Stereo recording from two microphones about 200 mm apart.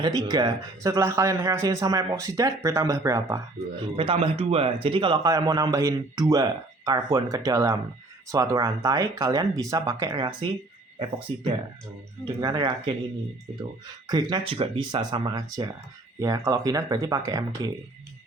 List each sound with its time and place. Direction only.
0.0 s speech: 20° right (ahead or behind)
3.9 s speech: 25° right (ahead or behind)
12.2 s speech: 20° right (ahead or behind)